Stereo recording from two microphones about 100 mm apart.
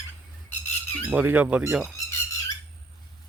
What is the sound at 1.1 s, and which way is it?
Speech, 15° right (ahead or behind).